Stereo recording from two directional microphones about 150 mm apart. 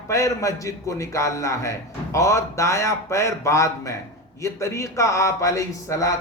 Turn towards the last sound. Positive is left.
turn(degrees=20)  # may be behind; listen again after turning